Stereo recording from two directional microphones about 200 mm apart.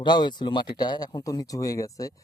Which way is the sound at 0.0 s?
20° left (ahead or behind).